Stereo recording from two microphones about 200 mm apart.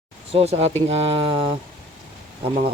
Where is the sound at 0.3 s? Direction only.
30° right (ahead or behind).